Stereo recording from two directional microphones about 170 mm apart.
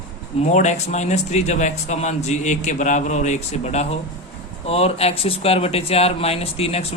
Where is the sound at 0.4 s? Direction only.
45° left (ahead or behind).